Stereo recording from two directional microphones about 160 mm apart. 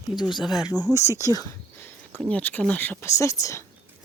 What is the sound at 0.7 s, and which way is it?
Speech, 15° right (ahead or behind).